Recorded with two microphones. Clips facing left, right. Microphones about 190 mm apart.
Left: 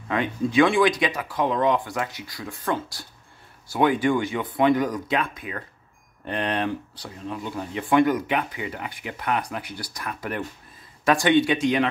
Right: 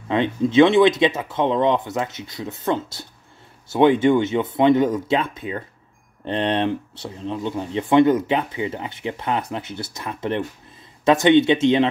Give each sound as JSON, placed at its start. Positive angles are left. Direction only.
{"t": 0.1, "sound": "speech", "side_deg": -25}